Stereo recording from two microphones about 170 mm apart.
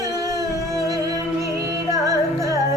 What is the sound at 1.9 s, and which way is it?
Music, 20° right (ahead or behind).